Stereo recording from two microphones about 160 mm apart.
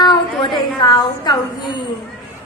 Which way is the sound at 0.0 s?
25° left (ahead or behind).